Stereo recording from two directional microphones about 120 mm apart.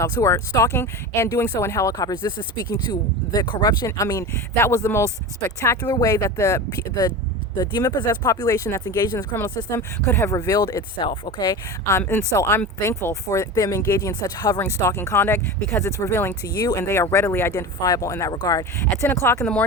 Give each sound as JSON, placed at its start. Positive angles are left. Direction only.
{"t": 0.0, "sound": "speech", "side_deg": 25}
{"t": 10.9, "sound": "speech", "side_deg": 45}
{"t": 11.9, "sound": "speech", "side_deg": 20}
{"t": 14.6, "sound": "speech", "side_deg": 20}
{"t": 16.6, "sound": "speech", "side_deg": 35}
{"t": 16.8, "sound": "speech", "side_deg": 20}